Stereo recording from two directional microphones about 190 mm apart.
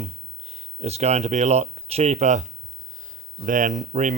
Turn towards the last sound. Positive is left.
turn(degrees=-40)  # may be behind; listen again after turning